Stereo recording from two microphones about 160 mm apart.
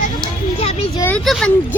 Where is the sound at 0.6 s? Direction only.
40° left (ahead or behind).